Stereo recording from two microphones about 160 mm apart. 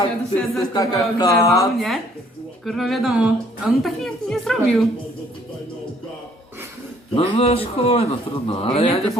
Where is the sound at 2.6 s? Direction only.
Centre (ahead or behind).